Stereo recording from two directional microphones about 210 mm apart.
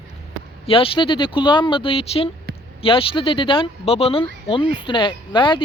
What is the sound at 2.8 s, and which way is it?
Speech, 25° left (ahead or behind).